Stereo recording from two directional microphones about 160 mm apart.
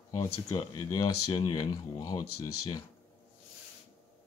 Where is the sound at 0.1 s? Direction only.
20° left (ahead or behind).